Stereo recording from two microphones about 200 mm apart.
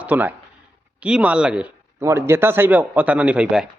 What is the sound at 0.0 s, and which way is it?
Speech, 10° right (ahead or behind).